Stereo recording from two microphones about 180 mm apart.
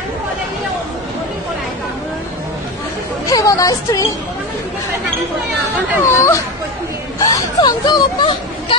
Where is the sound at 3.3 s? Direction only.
20° left (ahead or behind).